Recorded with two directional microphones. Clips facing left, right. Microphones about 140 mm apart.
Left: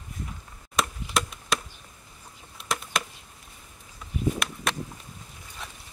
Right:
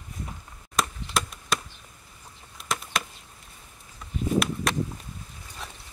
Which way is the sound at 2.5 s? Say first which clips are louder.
Even; centre (ahead or behind).